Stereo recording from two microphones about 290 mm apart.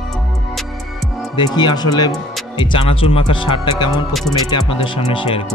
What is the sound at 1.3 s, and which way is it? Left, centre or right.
Speech, centre.